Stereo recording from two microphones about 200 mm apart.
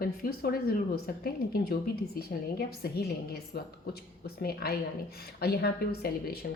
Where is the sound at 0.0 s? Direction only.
50° left (ahead or behind).